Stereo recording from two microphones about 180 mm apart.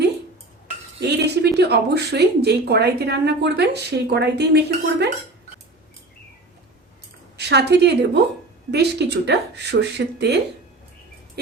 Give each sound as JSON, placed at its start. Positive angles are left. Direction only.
{"t": 0.9, "sound": "speech", "side_deg": -70}
{"t": 7.3, "sound": "speech", "side_deg": -65}